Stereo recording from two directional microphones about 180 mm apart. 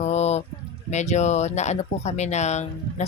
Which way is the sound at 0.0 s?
40° left (ahead or behind).